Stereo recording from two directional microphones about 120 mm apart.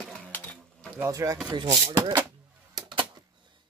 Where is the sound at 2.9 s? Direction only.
40° right (ahead or behind).